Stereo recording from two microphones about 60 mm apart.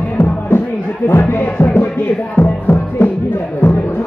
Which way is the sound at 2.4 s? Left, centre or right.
Left.